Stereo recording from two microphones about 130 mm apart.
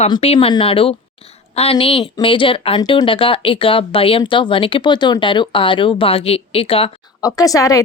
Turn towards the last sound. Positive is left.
turn(degrees=25)  # may be behind; listen again after turning